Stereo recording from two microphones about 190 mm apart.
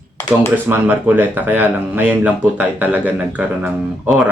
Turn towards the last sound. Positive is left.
turn(degrees=-5)  # may be behind; listen again after turning